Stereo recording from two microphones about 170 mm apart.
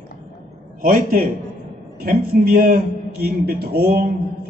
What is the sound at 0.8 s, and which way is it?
A man's voice, 55° right (ahead or behind).